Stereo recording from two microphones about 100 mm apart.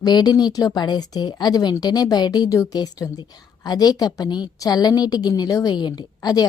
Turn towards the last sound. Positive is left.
turn(degrees=40)  # may be behind; listen again after turning